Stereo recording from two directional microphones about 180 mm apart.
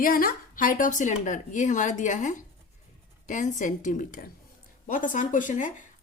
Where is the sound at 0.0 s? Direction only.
50° left (ahead or behind).